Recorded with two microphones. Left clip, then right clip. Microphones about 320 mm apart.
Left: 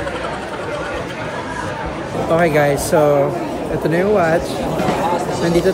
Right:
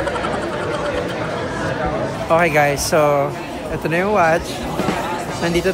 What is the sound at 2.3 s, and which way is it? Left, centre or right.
Speech, centre.